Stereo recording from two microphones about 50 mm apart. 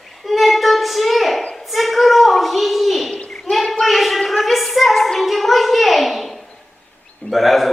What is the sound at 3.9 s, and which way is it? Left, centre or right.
Speech, centre.